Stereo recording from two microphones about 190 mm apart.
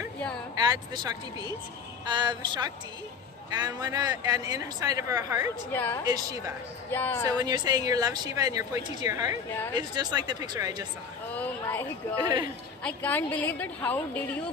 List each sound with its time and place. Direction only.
0.6 s speech: 20° right (ahead or behind)
5.7 s a woman's voice: 10° left (ahead or behind)
7.3 s speech: 20° right (ahead or behind)
11.3 s a sound: 10° left (ahead or behind)
12.8 s a woman's voice: 10° left (ahead or behind)